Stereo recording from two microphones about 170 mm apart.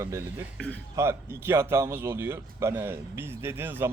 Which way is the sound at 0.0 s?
15° right (ahead or behind).